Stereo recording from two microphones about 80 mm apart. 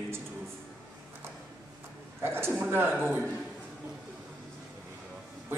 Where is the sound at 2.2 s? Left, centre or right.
Right.